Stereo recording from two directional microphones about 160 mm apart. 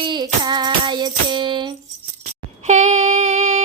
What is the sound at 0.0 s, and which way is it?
Music, 30° right (ahead or behind).